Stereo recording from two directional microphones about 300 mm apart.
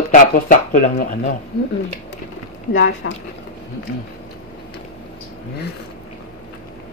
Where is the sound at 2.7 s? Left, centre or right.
Left.